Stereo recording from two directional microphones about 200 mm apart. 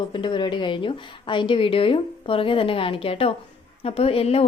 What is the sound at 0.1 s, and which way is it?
A woman's voice, 25° left (ahead or behind).